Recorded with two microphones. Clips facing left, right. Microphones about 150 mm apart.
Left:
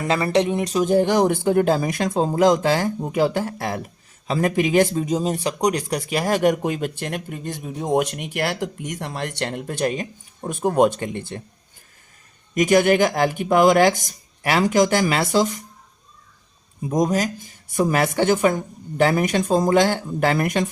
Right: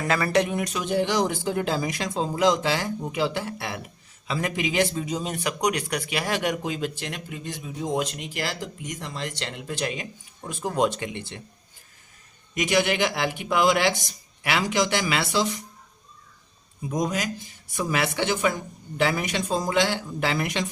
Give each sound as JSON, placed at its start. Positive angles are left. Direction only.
{"t": 0.1, "sound": "speech", "side_deg": 25}
{"t": 12.5, "sound": "speech", "side_deg": 45}
{"t": 16.9, "sound": "speech", "side_deg": 40}